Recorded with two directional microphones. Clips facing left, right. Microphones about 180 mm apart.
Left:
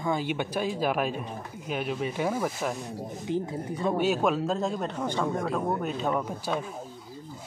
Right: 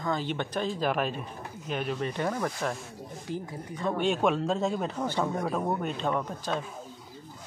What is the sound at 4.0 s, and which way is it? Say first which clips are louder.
A man's voice: right 1 dB; 5° left (ahead or behind).